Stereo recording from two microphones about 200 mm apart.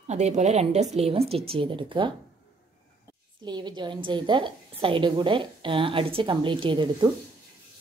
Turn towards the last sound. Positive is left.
turn(degrees=-25)  # may be behind; listen again after turning